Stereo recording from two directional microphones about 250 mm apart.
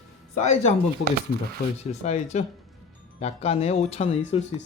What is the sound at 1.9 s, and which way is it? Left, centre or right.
Speech, left.